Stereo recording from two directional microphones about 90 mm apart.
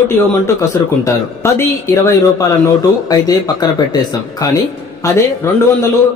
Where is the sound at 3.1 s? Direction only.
45° left (ahead or behind); by 5.5 s 30° left (ahead or behind).